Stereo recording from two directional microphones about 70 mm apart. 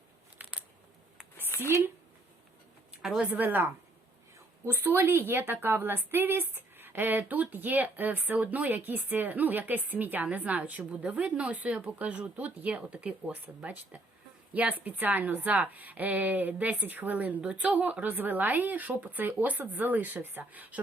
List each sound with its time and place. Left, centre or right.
0.4 s crunch: right
1.5 s a sound: left
3.0 s speech: centre
3.3 s a woman's voice: right